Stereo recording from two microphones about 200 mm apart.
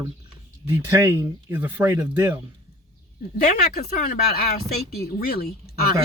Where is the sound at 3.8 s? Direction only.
50° left (ahead or behind).